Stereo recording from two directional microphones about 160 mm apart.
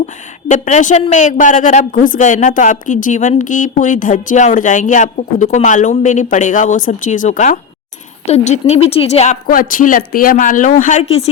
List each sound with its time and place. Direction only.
0.4 s a woman's voice: 50° left (ahead or behind)